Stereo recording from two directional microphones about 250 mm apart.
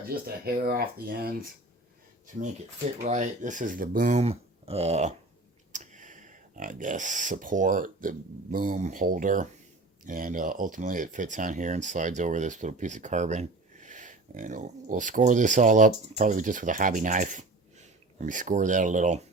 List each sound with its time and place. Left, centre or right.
0.1 s speech: right
3.0 s speech: right